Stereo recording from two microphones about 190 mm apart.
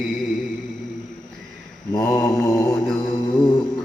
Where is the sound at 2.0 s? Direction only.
15° left (ahead or behind).